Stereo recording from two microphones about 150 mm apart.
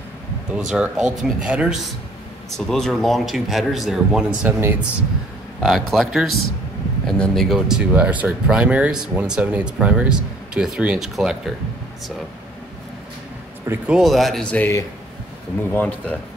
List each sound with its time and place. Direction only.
0.5 s speech: 5° right (ahead or behind)
4.6 s speech: 15° right (ahead or behind)
5.6 s speech: centre (ahead or behind)
13.7 s speech: 5° right (ahead or behind)
15.7 s speech: 10° left (ahead or behind)